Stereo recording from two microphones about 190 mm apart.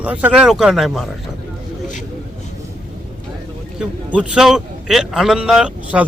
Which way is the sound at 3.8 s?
5° right (ahead or behind).